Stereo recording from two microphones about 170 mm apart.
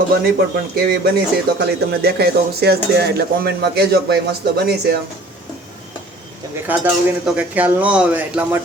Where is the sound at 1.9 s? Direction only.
70° right (ahead or behind).